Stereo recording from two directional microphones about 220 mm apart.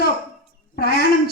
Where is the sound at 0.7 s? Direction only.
45° left (ahead or behind).